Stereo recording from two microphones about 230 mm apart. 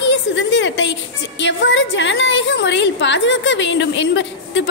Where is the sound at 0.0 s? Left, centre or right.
Left.